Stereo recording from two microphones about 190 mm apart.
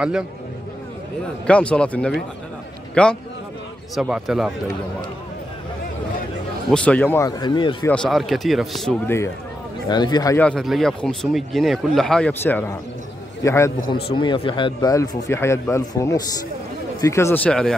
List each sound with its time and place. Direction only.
1.5 s a man's voice: 5° left (ahead or behind)
6.7 s speech: 5° left (ahead or behind); by 7.7 s 25° left (ahead or behind)
7.8 s speech: 5° left (ahead or behind)
9.0 s a man's voice: 15° left (ahead or behind)
10.4 s a man's voice: centre (ahead or behind)
14.1 s a man's voice: 25° left (ahead or behind); by 17.7 s 5° left (ahead or behind)